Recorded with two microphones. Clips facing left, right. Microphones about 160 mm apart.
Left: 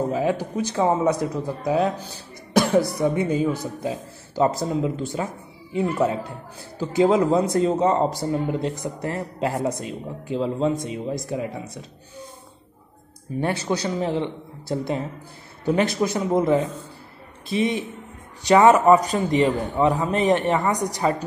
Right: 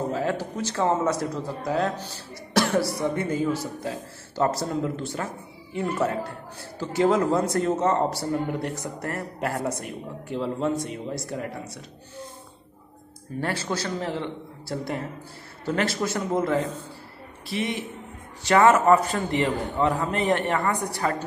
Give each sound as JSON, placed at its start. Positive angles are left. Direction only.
{"t": 0.1, "sound": "a man's voice", "side_deg": 15}
{"t": 13.4, "sound": "a man's voice", "side_deg": 15}